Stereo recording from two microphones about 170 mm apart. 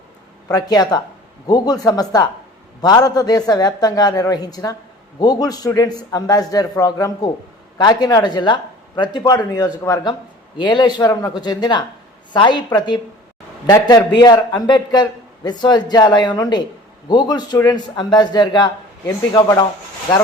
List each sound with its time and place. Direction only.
0.4 s a man's voice: 20° left (ahead or behind)